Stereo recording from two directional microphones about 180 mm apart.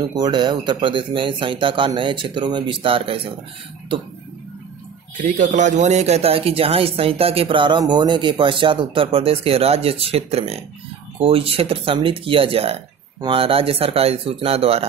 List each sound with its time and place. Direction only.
0.0 s speech: 20° right (ahead or behind)
5.1 s speech: 45° right (ahead or behind)